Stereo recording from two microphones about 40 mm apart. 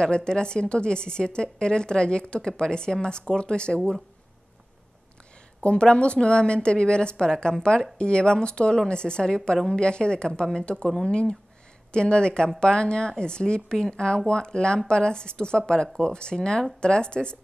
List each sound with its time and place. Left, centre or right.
0.0 s a woman's voice: left
5.6 s a woman's voice: left